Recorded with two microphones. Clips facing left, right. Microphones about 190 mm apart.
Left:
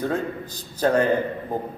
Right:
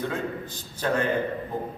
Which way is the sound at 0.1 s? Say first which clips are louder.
Left 4 dB; 40° left (ahead or behind).